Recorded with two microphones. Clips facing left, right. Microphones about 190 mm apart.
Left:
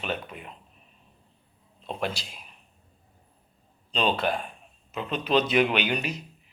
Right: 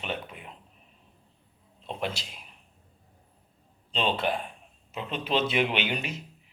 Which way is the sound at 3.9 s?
25° right (ahead or behind).